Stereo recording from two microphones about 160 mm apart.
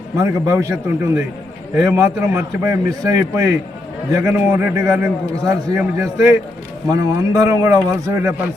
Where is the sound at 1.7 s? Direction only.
20° right (ahead or behind).